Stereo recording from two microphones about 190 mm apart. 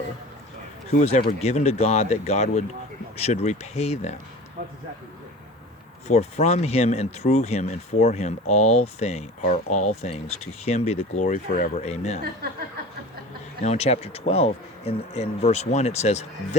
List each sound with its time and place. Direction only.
0.9 s speech: 35° left (ahead or behind)
6.1 s speech: 35° left (ahead or behind)
12.2 s speech: 55° right (ahead or behind)
13.6 s speech: 35° left (ahead or behind)